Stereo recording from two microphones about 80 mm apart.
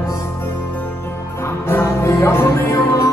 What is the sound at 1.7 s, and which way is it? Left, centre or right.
Music, left.